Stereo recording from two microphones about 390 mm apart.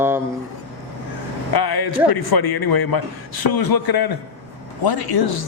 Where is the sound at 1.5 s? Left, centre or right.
Left.